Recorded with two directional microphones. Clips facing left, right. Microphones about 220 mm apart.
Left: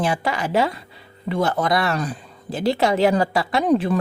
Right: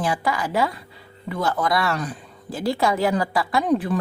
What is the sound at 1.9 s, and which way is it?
Speech, 35° left (ahead or behind).